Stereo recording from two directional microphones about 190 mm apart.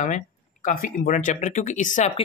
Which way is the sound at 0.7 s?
45° left (ahead or behind).